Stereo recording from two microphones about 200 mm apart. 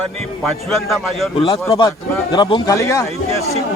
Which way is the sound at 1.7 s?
15° left (ahead or behind).